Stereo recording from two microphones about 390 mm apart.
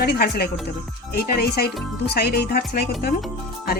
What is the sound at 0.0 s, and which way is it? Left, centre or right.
Music, left.